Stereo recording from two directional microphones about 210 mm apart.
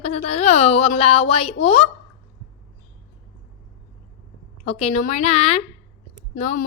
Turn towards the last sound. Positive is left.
turn(degrees=35)  # may be behind; listen again after turning